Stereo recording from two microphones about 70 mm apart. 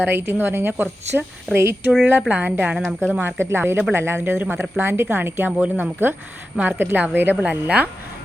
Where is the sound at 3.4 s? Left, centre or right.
Right.